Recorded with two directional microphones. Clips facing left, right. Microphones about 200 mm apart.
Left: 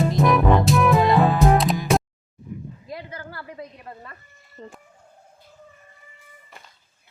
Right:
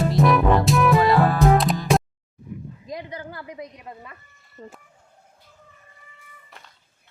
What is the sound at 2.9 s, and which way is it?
A woman's voice, 15° right (ahead or behind).